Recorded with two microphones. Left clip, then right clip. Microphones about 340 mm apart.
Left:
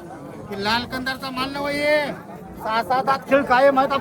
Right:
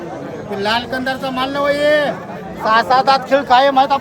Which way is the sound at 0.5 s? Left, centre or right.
Right.